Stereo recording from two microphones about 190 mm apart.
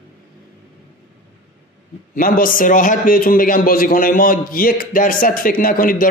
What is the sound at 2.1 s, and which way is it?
A man's voice, 45° left (ahead or behind).